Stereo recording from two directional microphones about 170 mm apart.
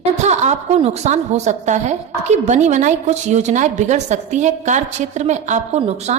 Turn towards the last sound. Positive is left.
turn(degrees=-45)  # may be behind; listen again after turning